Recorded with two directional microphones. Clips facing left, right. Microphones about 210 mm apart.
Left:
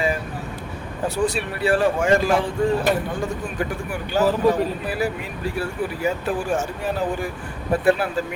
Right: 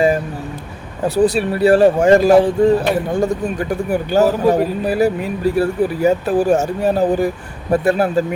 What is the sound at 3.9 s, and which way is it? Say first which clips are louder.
Speech: right 6 dB; 40° right (ahead or behind).